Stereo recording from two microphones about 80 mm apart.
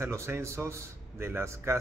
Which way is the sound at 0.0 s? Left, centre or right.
Right.